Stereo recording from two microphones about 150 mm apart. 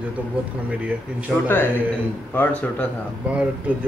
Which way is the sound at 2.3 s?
10° left (ahead or behind).